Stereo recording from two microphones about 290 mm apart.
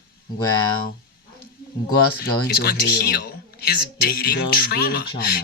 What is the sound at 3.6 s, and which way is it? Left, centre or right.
A woman's voice, left.